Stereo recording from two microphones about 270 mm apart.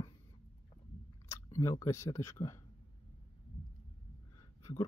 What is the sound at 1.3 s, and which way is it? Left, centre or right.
Speech, centre.